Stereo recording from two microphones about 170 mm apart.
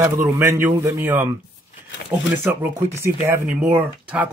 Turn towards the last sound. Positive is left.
turn(degrees=-10)  # may be behind; listen again after turning